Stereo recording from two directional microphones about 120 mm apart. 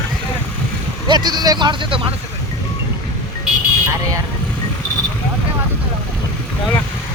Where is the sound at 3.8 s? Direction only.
30° right (ahead or behind).